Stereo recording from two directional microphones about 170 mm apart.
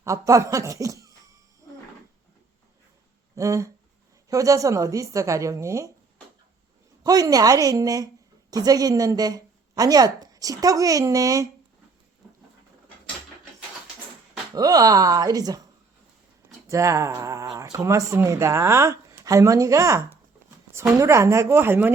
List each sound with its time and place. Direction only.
0.0 s speech: 20° right (ahead or behind)
3.3 s a woman's voice: 20° right (ahead or behind)
7.0 s a woman's voice: 20° right (ahead or behind)
14.5 s a woman's voice: 20° right (ahead or behind)
16.6 s speech: 20° right (ahead or behind)